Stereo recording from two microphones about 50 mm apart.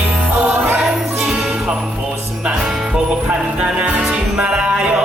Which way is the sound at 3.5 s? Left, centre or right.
Centre.